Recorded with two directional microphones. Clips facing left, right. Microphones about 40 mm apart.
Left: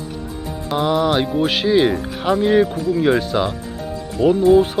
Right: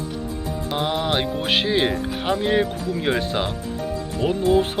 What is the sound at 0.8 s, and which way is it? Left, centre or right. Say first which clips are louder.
Speech: left 6 dB; right.